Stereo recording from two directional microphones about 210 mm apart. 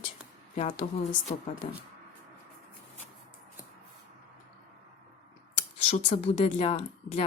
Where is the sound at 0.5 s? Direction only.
30° left (ahead or behind).